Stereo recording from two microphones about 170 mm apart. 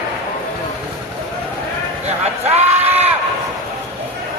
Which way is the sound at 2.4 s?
40° right (ahead or behind).